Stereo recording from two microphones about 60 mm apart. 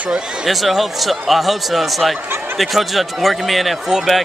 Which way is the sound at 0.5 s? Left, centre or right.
Centre.